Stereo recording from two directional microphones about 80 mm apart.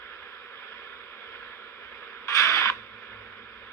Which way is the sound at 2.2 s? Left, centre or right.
Left.